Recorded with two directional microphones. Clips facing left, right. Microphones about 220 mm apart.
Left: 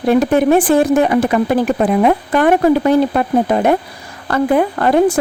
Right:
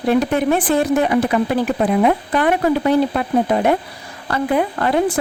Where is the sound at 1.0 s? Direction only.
45° left (ahead or behind).